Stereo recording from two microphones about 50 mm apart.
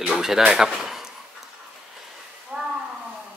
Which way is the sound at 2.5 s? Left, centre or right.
Centre.